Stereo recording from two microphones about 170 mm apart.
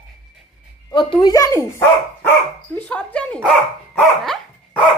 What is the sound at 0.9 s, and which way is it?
Speech, 25° left (ahead or behind).